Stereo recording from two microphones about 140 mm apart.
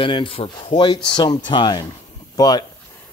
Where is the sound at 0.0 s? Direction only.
40° left (ahead or behind).